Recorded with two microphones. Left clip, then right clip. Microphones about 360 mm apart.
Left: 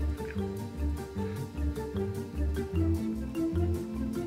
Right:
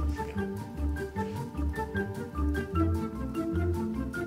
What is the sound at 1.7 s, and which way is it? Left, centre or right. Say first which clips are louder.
Music: right 2 dB; centre.